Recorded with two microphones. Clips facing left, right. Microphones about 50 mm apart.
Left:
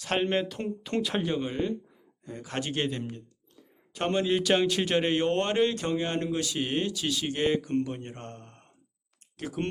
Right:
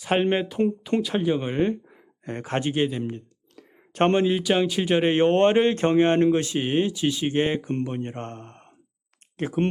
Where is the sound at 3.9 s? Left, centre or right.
Right.